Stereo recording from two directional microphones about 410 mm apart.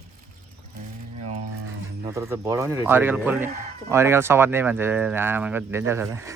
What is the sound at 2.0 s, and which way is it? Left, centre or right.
Speech, centre.